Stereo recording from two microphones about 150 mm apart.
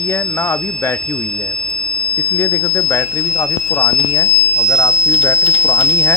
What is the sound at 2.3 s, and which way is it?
Speech, 15° left (ahead or behind).